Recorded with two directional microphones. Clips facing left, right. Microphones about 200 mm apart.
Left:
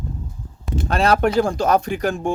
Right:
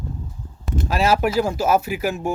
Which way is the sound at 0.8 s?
5° right (ahead or behind).